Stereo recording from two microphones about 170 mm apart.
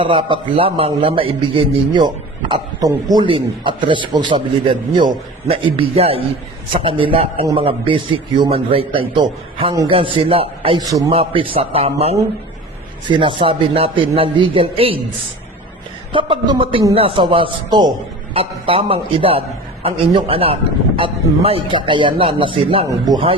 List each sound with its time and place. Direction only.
0.0 s a man's voice: 30° right (ahead or behind)
10.8 s a man's voice: 20° right (ahead or behind)
11.1 s a man's voice: 30° right (ahead or behind)
16.1 s a man's voice: 30° right (ahead or behind)